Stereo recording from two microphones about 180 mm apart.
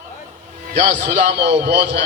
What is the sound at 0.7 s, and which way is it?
A man's voice, 70° right (ahead or behind).